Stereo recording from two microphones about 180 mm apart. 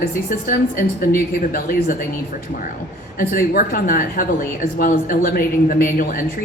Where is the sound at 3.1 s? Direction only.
50° left (ahead or behind).